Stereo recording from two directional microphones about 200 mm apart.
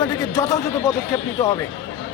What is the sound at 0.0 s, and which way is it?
Speech, 20° left (ahead or behind).